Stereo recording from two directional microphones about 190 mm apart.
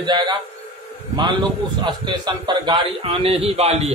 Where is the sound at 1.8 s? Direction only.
20° right (ahead or behind).